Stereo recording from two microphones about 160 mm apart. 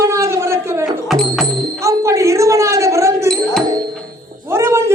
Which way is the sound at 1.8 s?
20° right (ahead or behind).